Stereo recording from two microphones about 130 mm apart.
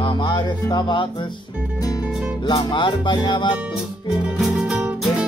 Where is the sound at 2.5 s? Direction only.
35° left (ahead or behind).